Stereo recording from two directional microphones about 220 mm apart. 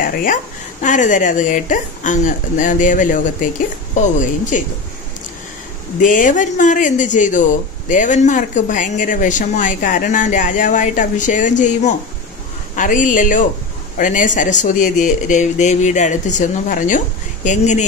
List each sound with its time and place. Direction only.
0.0 s speech: 40° left (ahead or behind)
5.9 s speech: 35° left (ahead or behind)